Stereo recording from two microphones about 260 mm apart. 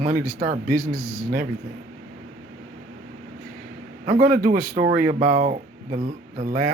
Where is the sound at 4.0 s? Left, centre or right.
Right.